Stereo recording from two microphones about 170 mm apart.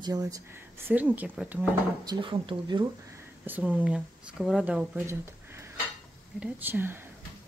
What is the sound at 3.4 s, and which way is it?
Speech, 10° right (ahead or behind).